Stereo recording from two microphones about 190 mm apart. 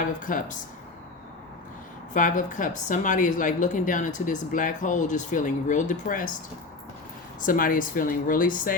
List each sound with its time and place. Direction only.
0.0 s speech: 45° left (ahead or behind)
2.1 s a woman's voice: 40° left (ahead or behind)
7.4 s speech: 45° left (ahead or behind)